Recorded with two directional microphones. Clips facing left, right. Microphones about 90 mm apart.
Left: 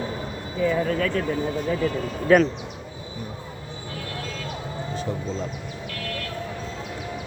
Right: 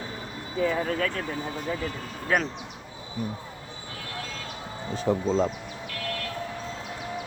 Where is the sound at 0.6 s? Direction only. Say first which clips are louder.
Left 3 dB; 45° right (ahead or behind).